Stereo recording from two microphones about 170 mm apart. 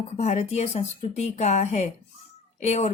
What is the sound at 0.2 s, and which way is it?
Speech, 40° left (ahead or behind).